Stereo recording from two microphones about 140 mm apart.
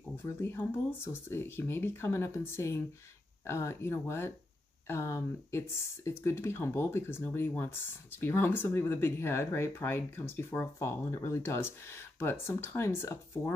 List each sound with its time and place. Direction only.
0.2 s speech: 15° left (ahead or behind)